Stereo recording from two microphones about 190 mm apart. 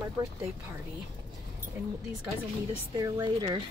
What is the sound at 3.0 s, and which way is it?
Speech, 20° right (ahead or behind).